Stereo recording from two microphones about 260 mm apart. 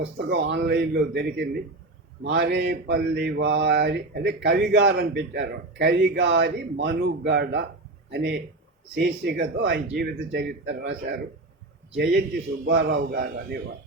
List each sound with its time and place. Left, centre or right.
0.0 s mantra: right